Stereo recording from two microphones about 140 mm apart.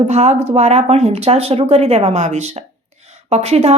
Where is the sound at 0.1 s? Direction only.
50° right (ahead or behind).